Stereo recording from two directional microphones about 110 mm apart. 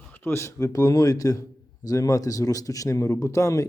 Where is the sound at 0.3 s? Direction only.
25° left (ahead or behind).